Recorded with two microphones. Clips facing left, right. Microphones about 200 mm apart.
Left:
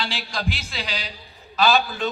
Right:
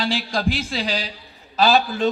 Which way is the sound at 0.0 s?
40° right (ahead or behind).